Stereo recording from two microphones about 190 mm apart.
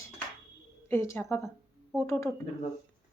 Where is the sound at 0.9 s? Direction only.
15° left (ahead or behind).